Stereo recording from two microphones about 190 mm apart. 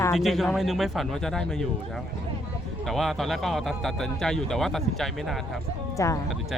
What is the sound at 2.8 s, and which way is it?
A man's voice, centre (ahead or behind).